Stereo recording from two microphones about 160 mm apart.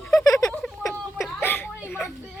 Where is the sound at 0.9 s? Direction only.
Centre (ahead or behind).